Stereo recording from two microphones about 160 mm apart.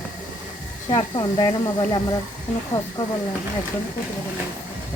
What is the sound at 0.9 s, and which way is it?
Speech, 30° left (ahead or behind).